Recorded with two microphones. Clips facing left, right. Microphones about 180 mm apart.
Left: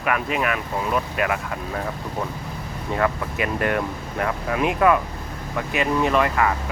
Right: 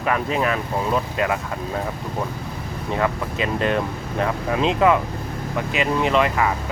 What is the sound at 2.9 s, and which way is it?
Speech, 20° right (ahead or behind).